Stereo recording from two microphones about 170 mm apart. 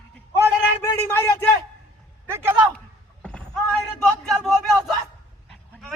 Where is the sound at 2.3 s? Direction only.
15° right (ahead or behind).